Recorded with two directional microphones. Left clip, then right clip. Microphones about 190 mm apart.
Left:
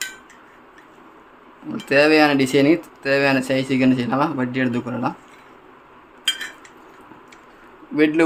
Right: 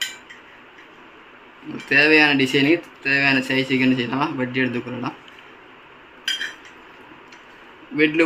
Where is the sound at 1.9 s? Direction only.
65° left (ahead or behind).